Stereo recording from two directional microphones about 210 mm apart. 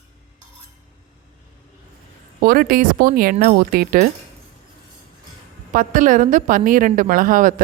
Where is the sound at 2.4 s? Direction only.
45° right (ahead or behind).